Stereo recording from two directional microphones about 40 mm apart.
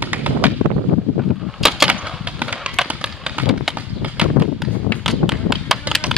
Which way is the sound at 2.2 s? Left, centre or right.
Right.